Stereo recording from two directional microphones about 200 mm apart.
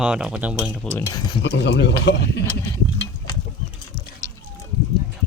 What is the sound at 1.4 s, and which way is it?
Speech, 60° left (ahead or behind).